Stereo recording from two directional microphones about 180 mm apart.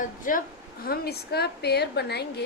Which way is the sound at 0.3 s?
45° left (ahead or behind).